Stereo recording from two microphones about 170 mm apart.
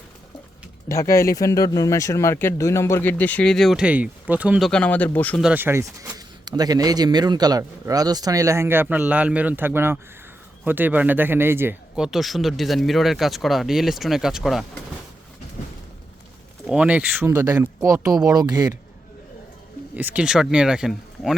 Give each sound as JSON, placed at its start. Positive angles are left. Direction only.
{"t": 0.9, "sound": "speech", "side_deg": 20}
{"t": 4.7, "sound": "speech", "side_deg": 10}
{"t": 5.4, "sound": "speech", "side_deg": -10}
{"t": 16.6, "sound": "speech", "side_deg": -5}
{"t": 19.9, "sound": "speech", "side_deg": -10}